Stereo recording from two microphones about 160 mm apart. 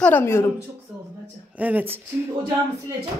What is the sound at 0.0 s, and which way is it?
Speech, 15° left (ahead or behind).